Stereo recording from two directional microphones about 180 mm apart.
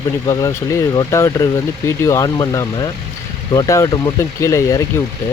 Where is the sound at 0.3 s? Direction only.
20° left (ahead or behind).